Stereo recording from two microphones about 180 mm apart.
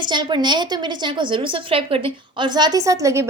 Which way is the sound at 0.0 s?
25° right (ahead or behind).